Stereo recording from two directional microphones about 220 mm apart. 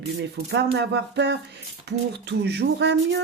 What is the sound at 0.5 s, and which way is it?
Speech, 50° right (ahead or behind).